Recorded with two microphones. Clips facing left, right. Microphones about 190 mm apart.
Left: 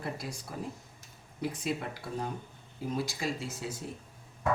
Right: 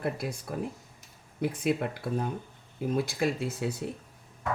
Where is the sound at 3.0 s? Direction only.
55° right (ahead or behind).